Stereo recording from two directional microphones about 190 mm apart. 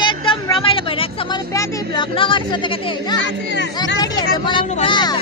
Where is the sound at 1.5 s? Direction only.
20° left (ahead or behind).